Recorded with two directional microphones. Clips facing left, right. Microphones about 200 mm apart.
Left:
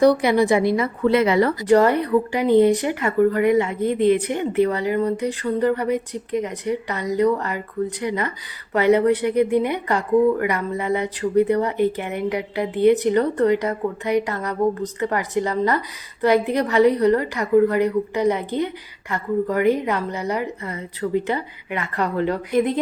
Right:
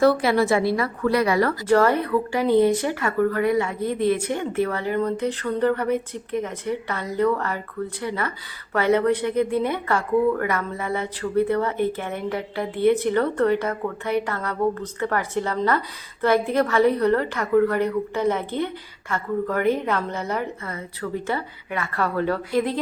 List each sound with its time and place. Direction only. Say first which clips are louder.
0.0 s a woman's voice: left 2 dB; 20° left (ahead or behind)